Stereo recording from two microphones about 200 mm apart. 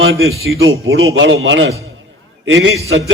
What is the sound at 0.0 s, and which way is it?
A man's voice, 80° right.